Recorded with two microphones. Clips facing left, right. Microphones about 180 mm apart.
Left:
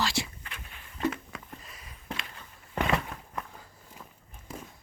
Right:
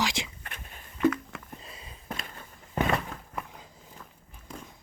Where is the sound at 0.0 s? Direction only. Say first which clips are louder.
Even; 15° right (ahead or behind).